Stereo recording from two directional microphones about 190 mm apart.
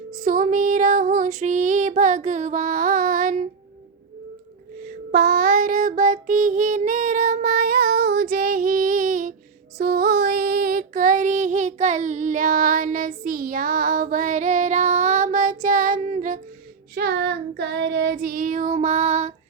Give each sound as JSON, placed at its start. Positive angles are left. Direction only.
{"t": 0.3, "sound": "female singing", "side_deg": -45}
{"t": 4.8, "sound": "female singing", "side_deg": -50}
{"t": 16.9, "sound": "child singing", "side_deg": -55}